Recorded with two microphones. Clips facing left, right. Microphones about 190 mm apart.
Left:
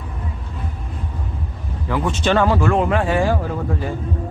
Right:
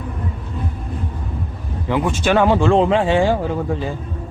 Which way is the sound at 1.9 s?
15° right (ahead or behind).